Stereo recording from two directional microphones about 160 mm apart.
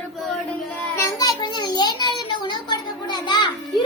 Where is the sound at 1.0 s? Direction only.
20° left (ahead or behind).